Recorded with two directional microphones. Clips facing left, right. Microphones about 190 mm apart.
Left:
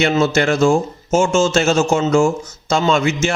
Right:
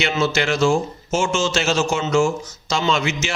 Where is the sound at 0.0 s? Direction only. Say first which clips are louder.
Left 5 dB; 50° left (ahead or behind).